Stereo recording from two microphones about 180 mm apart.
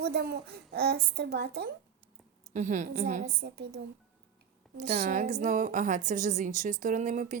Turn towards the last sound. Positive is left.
turn(degrees=-45)  # may be behind; listen again after turning